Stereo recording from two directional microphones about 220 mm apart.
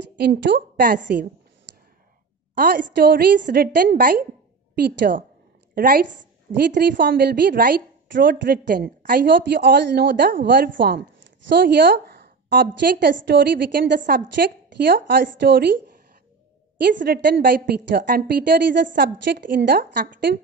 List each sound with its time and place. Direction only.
0.2 s a woman's voice: 50° right (ahead or behind)
2.5 s a woman's voice: 50° right (ahead or behind)
16.8 s a woman's voice: 50° right (ahead or behind)